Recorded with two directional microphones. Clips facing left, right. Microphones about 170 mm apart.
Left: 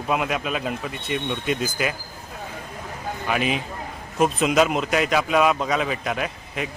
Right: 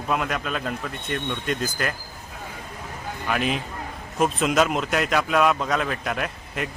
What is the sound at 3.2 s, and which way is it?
Speech, 5° left (ahead or behind).